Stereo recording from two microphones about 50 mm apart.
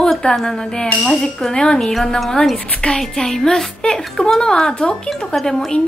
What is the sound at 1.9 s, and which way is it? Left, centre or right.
A woman's voice, centre.